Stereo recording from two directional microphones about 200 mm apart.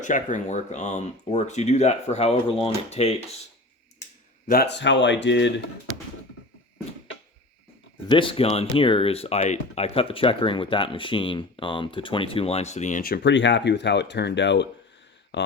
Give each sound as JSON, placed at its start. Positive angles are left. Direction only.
{"t": 0.0, "sound": "speech", "side_deg": 40}
{"t": 4.4, "sound": "speech", "side_deg": 50}
{"t": 8.0, "sound": "speech", "side_deg": 25}